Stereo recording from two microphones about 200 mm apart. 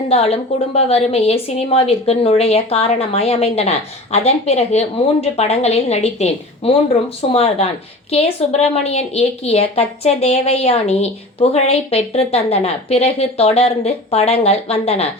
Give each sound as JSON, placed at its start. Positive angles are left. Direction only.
{"t": 0.1, "sound": "a woman's voice", "side_deg": 30}